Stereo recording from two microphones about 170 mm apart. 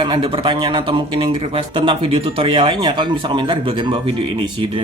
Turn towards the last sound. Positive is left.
turn(degrees=-30)  # may be behind; listen again after turning